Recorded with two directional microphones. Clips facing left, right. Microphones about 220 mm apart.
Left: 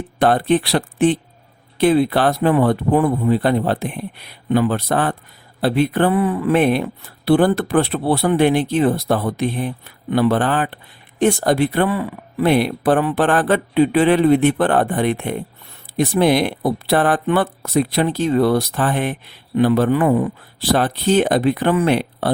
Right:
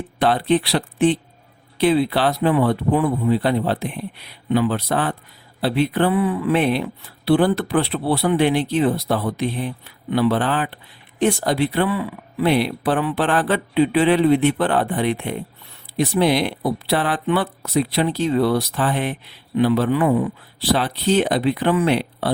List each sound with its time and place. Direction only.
0.2 s speech: 50° left (ahead or behind)